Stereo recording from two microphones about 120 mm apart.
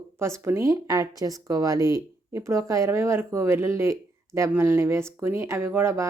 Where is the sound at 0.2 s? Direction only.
25° right (ahead or behind).